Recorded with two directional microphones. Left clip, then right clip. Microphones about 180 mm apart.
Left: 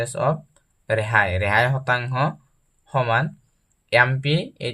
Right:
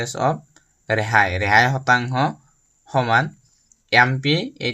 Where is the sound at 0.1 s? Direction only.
25° right (ahead or behind).